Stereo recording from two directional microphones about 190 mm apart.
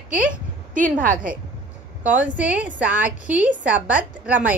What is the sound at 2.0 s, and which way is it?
A woman's voice, 10° right (ahead or behind).